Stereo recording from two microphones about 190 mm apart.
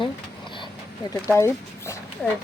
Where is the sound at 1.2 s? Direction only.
15° left (ahead or behind).